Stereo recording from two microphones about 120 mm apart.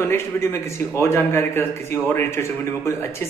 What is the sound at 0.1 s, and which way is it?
A man's voice, 20° left (ahead or behind).